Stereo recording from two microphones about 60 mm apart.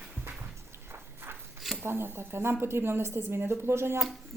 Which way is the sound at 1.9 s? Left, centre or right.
Right.